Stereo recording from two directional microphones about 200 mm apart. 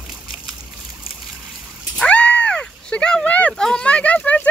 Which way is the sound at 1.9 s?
5° left (ahead or behind).